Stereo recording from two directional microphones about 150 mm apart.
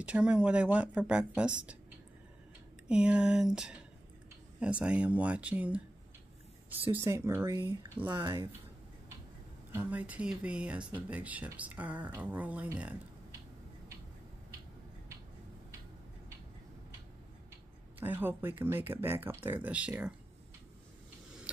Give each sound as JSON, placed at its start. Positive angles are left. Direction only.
{"t": 0.0, "sound": "speech", "side_deg": -5}
{"t": 2.9, "sound": "speech", "side_deg": -5}
{"t": 6.8, "sound": "speech", "side_deg": -15}
{"t": 8.1, "sound": "speech", "side_deg": -30}
{"t": 9.7, "sound": "speech", "side_deg": -10}
{"t": 17.9, "sound": "speech", "side_deg": -15}